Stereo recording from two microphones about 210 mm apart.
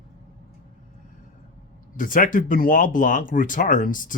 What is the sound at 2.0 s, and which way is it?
Speech, 40° left (ahead or behind).